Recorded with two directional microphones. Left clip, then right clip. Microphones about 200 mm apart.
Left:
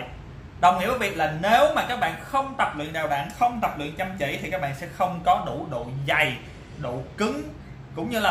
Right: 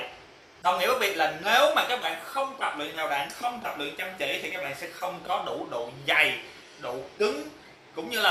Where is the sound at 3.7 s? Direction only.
5° left (ahead or behind).